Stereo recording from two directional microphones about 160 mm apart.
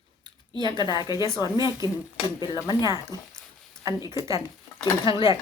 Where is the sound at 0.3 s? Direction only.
25° right (ahead or behind).